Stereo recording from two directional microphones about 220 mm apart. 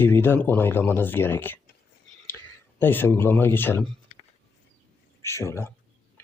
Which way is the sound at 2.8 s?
10° left (ahead or behind).